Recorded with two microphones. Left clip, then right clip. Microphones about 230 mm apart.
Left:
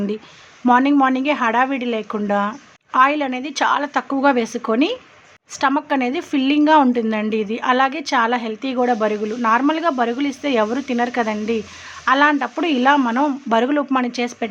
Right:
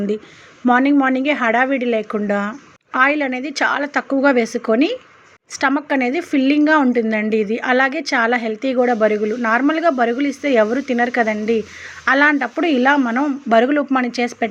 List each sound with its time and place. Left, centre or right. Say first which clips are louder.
0.6 s a woman's voice: even; centre